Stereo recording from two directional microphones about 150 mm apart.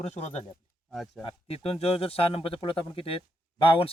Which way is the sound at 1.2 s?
40° left (ahead or behind).